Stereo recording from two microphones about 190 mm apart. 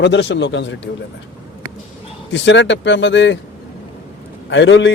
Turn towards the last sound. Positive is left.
turn(degrees=70)  # may be behind; listen again after turning